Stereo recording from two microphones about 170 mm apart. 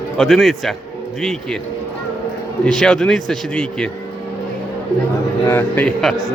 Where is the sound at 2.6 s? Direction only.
5° left (ahead or behind).